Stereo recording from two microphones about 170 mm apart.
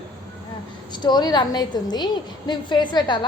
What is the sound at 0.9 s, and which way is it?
A woman's voice, 25° left (ahead or behind).